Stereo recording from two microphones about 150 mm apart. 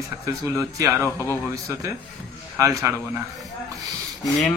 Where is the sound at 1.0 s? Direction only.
15° left (ahead or behind).